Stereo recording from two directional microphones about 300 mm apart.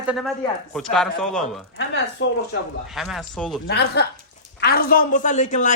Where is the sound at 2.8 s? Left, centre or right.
Centre.